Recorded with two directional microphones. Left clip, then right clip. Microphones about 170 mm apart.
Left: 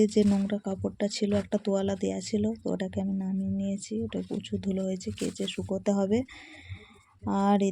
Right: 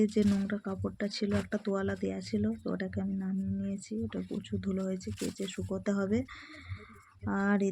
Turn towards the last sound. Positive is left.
turn(degrees=15)  # may be behind; listen again after turning